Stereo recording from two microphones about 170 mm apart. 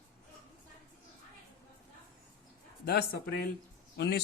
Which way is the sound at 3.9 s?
90° left.